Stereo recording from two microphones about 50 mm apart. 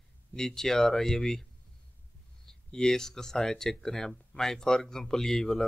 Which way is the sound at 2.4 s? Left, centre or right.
Centre.